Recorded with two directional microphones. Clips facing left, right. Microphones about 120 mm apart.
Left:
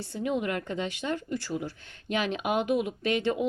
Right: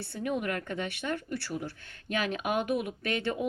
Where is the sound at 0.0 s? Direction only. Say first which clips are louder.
Left 3 dB; 20° left (ahead or behind).